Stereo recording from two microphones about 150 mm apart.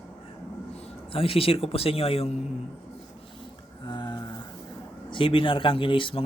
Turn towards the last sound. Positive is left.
turn(degrees=35)  # may be behind; listen again after turning